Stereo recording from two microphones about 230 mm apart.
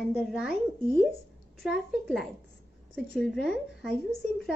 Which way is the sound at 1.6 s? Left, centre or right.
Centre.